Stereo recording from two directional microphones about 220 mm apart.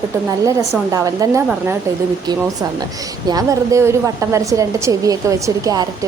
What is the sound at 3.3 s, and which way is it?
A woman's voice, 15° right (ahead or behind).